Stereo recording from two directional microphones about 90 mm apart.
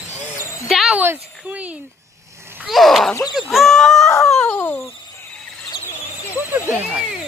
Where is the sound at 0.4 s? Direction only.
35° left (ahead or behind).